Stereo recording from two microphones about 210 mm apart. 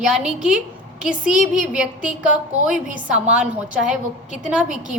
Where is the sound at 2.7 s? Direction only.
40° right (ahead or behind).